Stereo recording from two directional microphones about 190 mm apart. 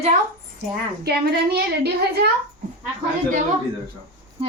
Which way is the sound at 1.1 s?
60° right (ahead or behind).